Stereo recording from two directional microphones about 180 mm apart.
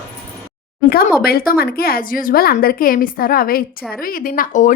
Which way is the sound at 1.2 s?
55° left (ahead or behind).